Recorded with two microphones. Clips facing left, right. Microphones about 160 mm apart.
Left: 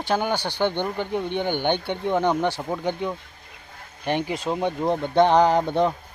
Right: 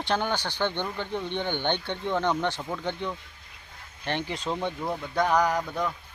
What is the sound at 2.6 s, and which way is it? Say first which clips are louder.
Speech: left 5 dB; 25° left (ahead or behind).